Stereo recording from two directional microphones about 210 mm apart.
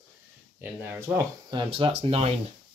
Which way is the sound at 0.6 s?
10° right (ahead or behind).